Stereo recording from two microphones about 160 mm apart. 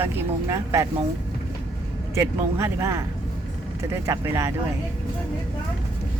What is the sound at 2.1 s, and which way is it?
Speech, 15° right (ahead or behind).